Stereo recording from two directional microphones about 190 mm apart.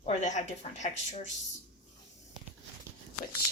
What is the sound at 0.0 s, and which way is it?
A woman's voice, 40° left (ahead or behind).